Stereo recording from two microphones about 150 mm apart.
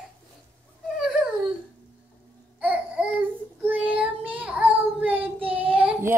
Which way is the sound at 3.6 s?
10° right (ahead or behind).